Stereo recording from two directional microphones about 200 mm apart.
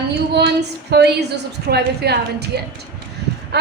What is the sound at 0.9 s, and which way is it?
A woman's voice, 55° right (ahead or behind).